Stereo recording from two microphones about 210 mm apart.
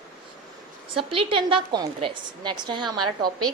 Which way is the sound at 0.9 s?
25° right (ahead or behind).